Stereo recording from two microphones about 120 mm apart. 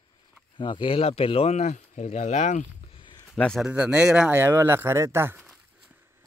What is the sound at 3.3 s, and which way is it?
Speech, 5° left (ahead or behind).